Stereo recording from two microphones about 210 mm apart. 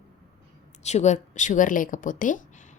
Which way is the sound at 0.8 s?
30° left (ahead or behind).